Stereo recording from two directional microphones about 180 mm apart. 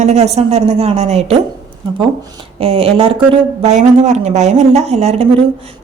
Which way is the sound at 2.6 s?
30° right (ahead or behind).